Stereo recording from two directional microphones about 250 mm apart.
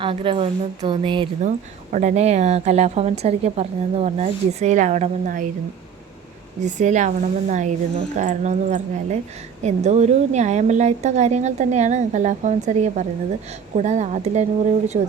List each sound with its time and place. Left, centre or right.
0.0 s speech: right
6.7 s speech: right